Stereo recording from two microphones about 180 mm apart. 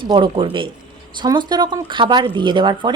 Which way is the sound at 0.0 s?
30° right (ahead or behind).